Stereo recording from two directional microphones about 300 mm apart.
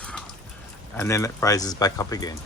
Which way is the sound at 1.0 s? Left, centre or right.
Centre.